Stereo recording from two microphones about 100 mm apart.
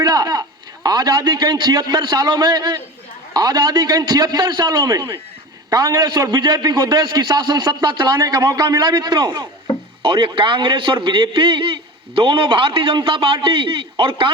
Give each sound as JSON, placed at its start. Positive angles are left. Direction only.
{"t": 0.0, "sound": "a man's voice", "side_deg": -40}
{"t": 10.0, "sound": "a man's voice", "side_deg": -55}